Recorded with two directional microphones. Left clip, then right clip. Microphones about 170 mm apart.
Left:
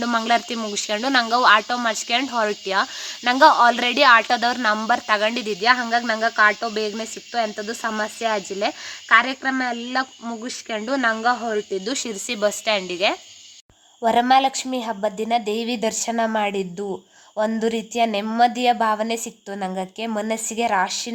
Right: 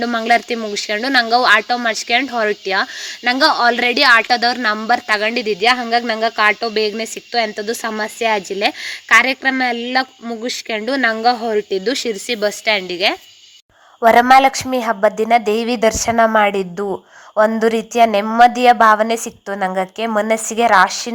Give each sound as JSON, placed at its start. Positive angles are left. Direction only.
{"t": 0.0, "sound": "speech", "side_deg": -10}
{"t": 7.5, "sound": "a woman's voice", "side_deg": -35}